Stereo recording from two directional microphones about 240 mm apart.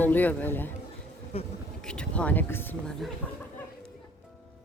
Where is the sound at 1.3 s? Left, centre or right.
Left.